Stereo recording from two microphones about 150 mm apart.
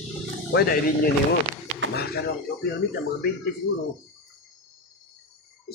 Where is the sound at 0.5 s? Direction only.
90° left.